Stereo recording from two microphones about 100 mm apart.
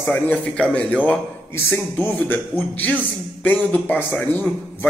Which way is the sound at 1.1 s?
20° left (ahead or behind).